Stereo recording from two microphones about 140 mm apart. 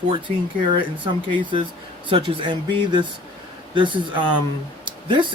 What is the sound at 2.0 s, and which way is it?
Speech, 40° right (ahead or behind).